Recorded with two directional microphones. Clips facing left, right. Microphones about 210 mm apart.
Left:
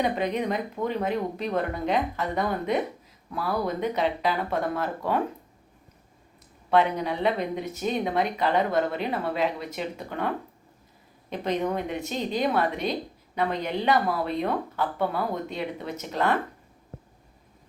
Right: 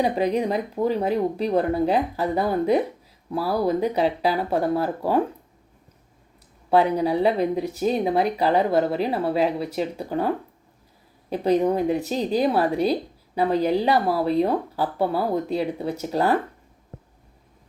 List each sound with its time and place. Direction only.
0.0 s speech: 35° right (ahead or behind)
6.7 s speech: 35° right (ahead or behind)